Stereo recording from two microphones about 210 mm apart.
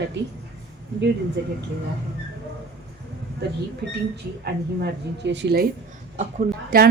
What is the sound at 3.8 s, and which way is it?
A woman's voice, 50° right (ahead or behind).